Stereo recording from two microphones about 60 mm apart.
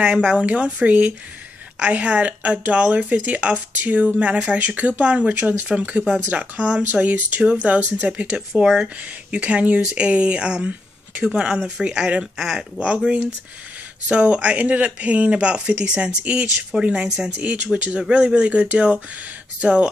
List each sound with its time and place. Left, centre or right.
0.0 s speech: centre
8.3 s speech: centre
17.4 s speech: right